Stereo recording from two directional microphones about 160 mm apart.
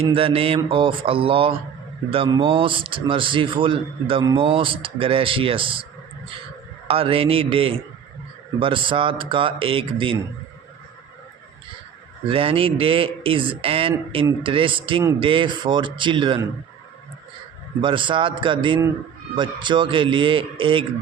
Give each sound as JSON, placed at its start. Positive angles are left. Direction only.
{"t": 0.1, "sound": "speech", "side_deg": -35}
{"t": 6.8, "sound": "speech", "side_deg": -35}
{"t": 12.3, "sound": "speech", "side_deg": -35}
{"t": 17.7, "sound": "speech", "side_deg": -30}